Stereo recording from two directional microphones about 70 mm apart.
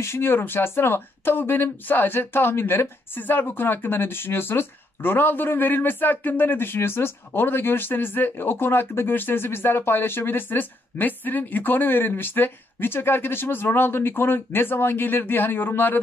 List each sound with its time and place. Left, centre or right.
0.0 s speech: left